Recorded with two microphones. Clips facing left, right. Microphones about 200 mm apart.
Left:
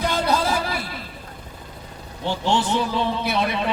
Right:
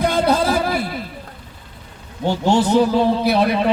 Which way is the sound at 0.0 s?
55° right (ahead or behind).